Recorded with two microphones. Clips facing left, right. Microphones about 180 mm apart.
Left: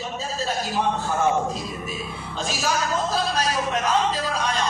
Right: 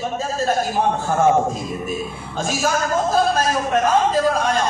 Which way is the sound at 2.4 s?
50° right (ahead or behind).